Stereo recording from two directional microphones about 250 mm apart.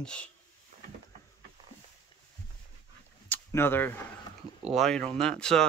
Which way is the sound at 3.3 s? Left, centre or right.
Centre.